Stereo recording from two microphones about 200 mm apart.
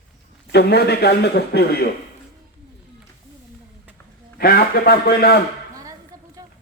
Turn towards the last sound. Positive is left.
turn(degrees=50)  # may be behind; listen again after turning